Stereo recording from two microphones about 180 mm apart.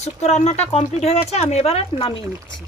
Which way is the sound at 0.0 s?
40° left (ahead or behind).